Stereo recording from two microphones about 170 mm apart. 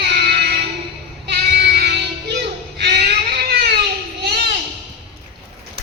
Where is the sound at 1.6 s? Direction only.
70° right (ahead or behind).